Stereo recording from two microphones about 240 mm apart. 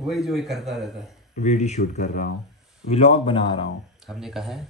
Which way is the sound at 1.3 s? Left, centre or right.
Left.